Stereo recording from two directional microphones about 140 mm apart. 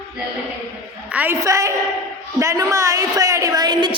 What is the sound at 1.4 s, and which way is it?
A woman's voice, 20° right (ahead or behind).